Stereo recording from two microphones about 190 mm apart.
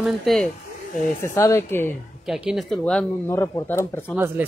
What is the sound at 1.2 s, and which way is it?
Speech, 15° left (ahead or behind).